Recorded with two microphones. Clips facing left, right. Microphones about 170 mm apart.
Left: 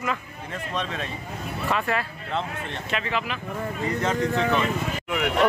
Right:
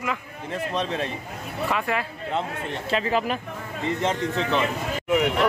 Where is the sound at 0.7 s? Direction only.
30° right (ahead or behind).